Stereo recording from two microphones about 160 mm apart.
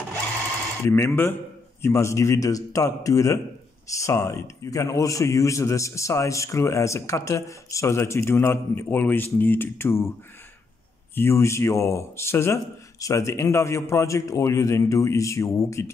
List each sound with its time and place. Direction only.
0.9 s a man's voice: 15° left (ahead or behind)
11.1 s a man's voice: 15° left (ahead or behind)